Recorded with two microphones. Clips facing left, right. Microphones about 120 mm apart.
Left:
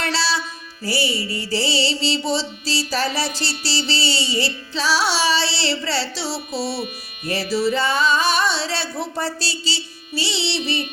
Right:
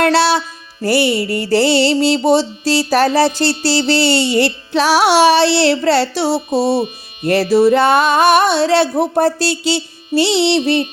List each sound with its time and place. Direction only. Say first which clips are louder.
0.0 s music: right 10 dB; 60° right (ahead or behind)
6.6 s music: right 10 dB; 20° right (ahead or behind)
7.5 s music: right 9 dB; 60° right (ahead or behind)